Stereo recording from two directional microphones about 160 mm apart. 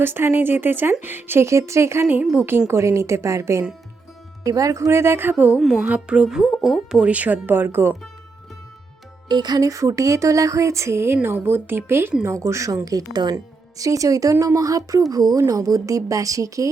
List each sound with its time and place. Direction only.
0.0 s speech: 15° right (ahead or behind)
5.5 s a woman's voice: centre (ahead or behind)
9.3 s speech: 25° right (ahead or behind)